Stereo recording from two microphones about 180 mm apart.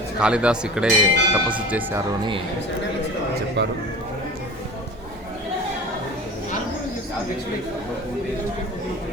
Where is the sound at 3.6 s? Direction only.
70° right (ahead or behind).